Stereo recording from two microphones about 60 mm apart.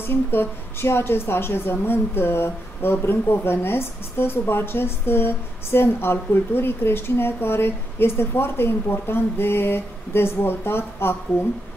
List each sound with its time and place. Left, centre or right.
0.0 s a woman's voice: left